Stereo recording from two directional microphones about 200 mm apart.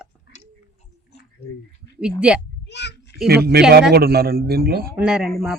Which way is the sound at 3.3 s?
50° right (ahead or behind).